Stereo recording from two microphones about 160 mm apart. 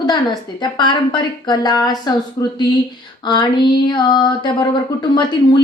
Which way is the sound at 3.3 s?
30° left (ahead or behind).